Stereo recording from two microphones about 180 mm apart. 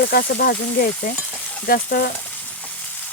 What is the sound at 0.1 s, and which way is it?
Speech, 60° left (ahead or behind).